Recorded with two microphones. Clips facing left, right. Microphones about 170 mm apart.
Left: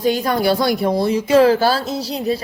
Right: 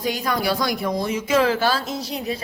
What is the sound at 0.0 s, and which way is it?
Speech, 30° left (ahead or behind).